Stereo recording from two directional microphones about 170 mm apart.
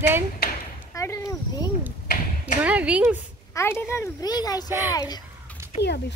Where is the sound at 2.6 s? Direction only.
10° right (ahead or behind).